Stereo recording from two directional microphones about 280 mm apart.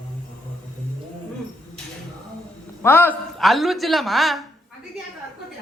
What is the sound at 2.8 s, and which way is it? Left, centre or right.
A man's voice, centre.